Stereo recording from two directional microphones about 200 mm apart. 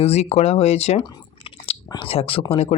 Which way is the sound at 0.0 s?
30° left (ahead or behind).